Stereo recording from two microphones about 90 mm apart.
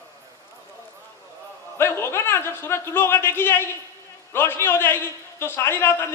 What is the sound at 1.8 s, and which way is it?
A man's voice, 30° left (ahead or behind).